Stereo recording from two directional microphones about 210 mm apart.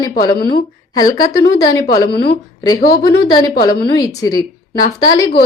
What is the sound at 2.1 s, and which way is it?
Speech, 50° left (ahead or behind).